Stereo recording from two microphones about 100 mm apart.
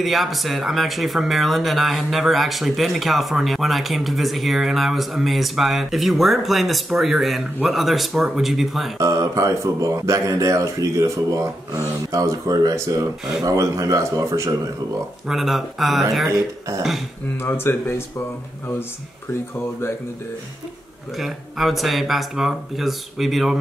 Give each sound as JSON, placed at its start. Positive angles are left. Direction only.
{"t": 0.0, "sound": "speech", "side_deg": 0}
{"t": 9.0, "sound": "speech", "side_deg": -35}
{"t": 15.2, "sound": "speech", "side_deg": 0}
{"t": 16.3, "sound": "speech", "side_deg": -35}
{"t": 17.4, "sound": "speech", "side_deg": 25}
{"t": 21.2, "sound": "speech", "side_deg": 0}